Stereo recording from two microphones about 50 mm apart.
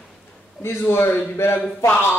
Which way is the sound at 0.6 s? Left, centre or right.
Left.